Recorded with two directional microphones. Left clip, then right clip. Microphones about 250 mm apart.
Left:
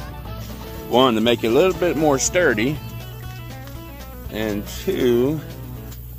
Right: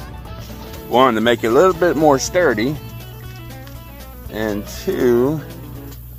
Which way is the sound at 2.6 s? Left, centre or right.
Centre.